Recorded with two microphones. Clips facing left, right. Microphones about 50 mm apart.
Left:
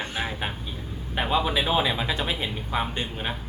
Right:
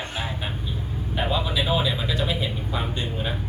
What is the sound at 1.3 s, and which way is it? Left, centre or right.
Speech, left.